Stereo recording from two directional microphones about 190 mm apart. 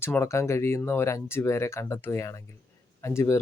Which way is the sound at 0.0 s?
15° left (ahead or behind).